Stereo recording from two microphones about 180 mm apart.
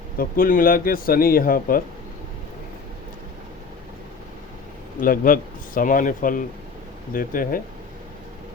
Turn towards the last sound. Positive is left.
turn(degrees=50)  # may be behind; listen again after turning